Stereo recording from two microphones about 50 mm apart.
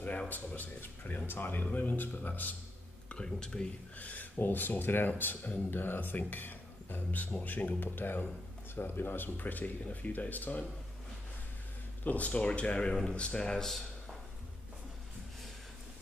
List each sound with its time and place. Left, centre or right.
0.6 s speech: left
3.3 s speech: centre
4.0 s speech: left
12.0 s speech: left; by 13.8 s centre